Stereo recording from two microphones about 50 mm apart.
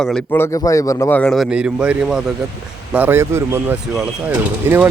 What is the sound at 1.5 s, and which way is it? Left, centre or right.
Speech, right.